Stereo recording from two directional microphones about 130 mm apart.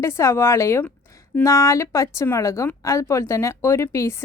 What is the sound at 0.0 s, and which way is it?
Speech, 20° left (ahead or behind).